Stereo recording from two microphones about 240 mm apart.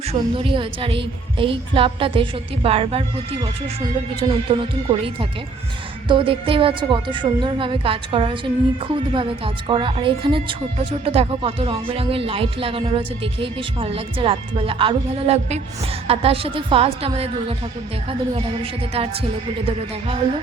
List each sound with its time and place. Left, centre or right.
0.1 s speech: right
4.2 s speech: right
18.3 s speech: right